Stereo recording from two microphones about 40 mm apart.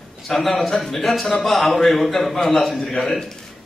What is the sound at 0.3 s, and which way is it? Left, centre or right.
A man's voice, centre.